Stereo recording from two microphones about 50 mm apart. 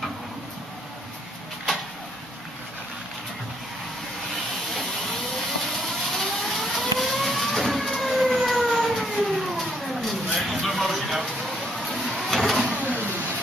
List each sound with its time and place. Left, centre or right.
6.1 s vehicle: centre
10.3 s a sound: centre
11.8 s vehicle: centre
12.6 s printer: right